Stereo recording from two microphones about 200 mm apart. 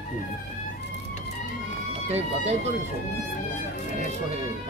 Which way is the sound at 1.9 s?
35° right (ahead or behind).